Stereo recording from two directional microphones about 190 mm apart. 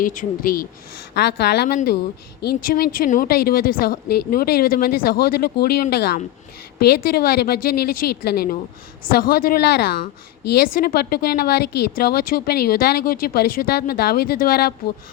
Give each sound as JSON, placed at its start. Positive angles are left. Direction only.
{"t": 0.0, "sound": "a woman's voice", "side_deg": 45}
{"t": 1.1, "sound": "a woman's voice", "side_deg": 60}